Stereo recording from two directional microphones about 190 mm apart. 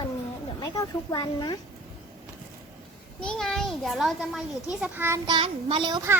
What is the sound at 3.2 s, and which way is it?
A child's voice, 5° left (ahead or behind).